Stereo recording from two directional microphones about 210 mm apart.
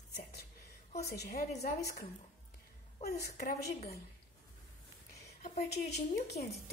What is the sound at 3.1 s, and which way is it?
Speech, 45° left (ahead or behind).